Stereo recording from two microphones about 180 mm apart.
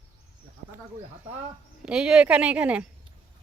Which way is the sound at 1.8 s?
5° right (ahead or behind).